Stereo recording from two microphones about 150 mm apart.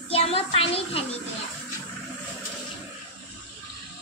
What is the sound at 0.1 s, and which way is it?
Speech, 40° left (ahead or behind).